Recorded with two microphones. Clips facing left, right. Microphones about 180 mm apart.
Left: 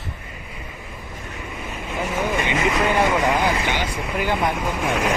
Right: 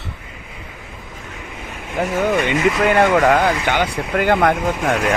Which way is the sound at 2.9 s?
65° right (ahead or behind).